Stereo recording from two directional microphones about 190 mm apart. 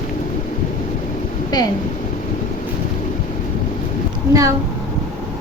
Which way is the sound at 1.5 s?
20° left (ahead or behind).